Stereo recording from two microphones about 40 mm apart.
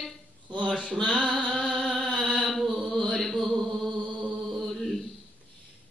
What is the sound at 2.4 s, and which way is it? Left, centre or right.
Chant, centre.